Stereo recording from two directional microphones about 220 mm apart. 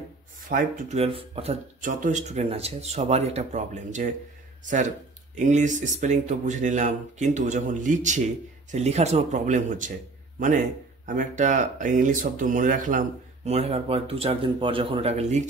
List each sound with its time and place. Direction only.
0.5 s speech: 35° right (ahead or behind)
5.3 s speech: 35° right (ahead or behind)
11.1 s speech: 35° right (ahead or behind)